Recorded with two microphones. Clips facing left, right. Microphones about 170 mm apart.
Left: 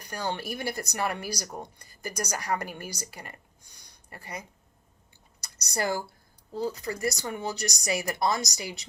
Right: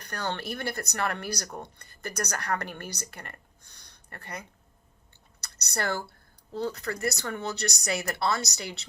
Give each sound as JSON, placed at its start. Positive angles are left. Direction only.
{"t": 0.0, "sound": "a woman's voice", "side_deg": 10}
{"t": 5.7, "sound": "speech", "side_deg": 10}